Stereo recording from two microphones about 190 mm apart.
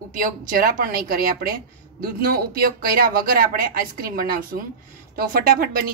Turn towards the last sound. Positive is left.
turn(degrees=-50)  # may be behind; listen again after turning